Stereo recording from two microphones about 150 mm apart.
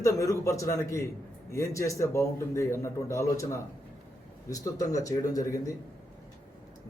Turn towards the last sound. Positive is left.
turn(degrees=20)  # may be behind; listen again after turning